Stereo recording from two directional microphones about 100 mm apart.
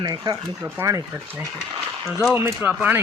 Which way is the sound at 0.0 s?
40° right (ahead or behind).